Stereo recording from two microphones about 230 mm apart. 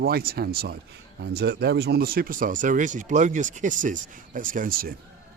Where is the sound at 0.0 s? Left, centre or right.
Right.